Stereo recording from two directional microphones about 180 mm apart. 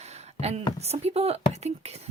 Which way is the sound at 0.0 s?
35° right (ahead or behind).